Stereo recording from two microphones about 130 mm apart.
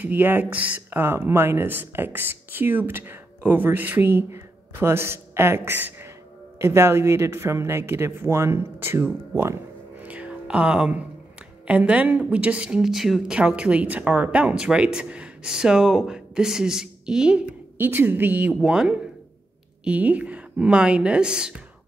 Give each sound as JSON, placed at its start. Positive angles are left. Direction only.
{"t": 0.0, "sound": "a woman's voice", "side_deg": -15}
{"t": 10.0, "sound": "music", "side_deg": -10}
{"t": 11.6, "sound": "a woman's voice", "side_deg": -10}
{"t": 18.6, "sound": "a woman's voice", "side_deg": -5}